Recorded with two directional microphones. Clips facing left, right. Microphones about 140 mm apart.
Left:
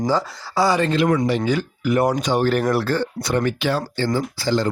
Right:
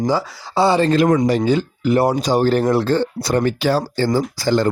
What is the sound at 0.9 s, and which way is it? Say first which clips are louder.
Speech: right 4 dB; 45° right (ahead or behind).